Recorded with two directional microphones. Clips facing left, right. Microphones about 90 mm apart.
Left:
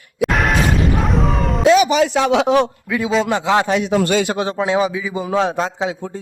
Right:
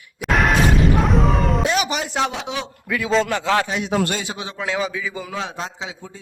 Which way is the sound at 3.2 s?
20° left (ahead or behind).